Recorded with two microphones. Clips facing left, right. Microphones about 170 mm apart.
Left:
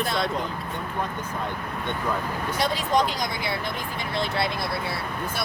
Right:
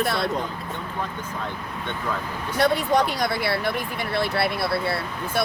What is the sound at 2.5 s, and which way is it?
Speech, 60° right (ahead or behind).